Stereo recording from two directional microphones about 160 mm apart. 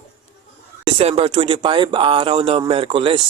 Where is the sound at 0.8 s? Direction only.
35° right (ahead or behind).